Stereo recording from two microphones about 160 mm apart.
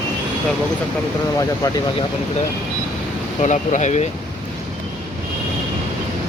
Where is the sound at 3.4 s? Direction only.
50° left (ahead or behind).